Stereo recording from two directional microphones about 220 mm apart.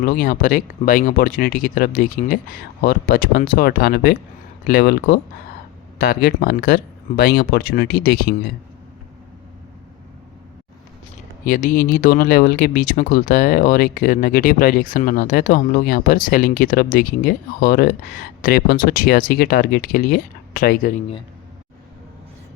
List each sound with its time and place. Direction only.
0.0 s speech: 40° left (ahead or behind)
11.4 s speech: 40° left (ahead or behind)